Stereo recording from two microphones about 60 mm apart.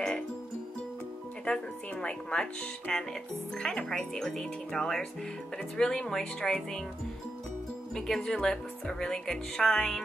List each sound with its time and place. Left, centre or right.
1.4 s speech: centre
7.9 s speech: centre